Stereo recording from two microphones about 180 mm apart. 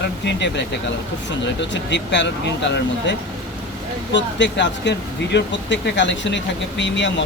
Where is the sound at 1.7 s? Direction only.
80° left.